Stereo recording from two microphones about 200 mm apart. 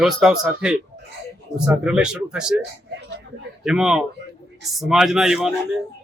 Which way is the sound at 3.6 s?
5° right (ahead or behind).